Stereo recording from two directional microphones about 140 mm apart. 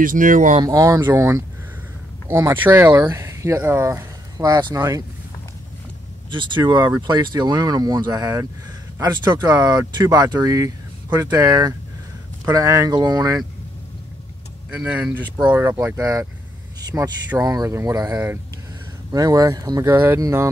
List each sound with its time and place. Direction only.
0.0 s speech: 70° right (ahead or behind)
0.7 s speech: 25° right (ahead or behind)
6.3 s speech: 35° right (ahead or behind)
14.8 s speech: 10° right (ahead or behind)
15.8 s speech: 20° right (ahead or behind)
16.9 s speech: 10° right (ahead or behind)
17.4 s speech: 25° right (ahead or behind)
19.1 s speech: 25° right (ahead or behind)